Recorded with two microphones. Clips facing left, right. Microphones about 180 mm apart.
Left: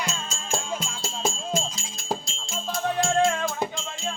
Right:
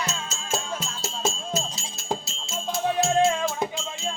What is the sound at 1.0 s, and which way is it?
Music, 5° right (ahead or behind).